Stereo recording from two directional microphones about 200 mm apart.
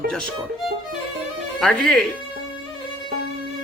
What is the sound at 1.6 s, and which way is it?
Speech, centre (ahead or behind).